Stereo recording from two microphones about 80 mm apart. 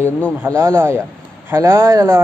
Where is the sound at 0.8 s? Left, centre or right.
Right.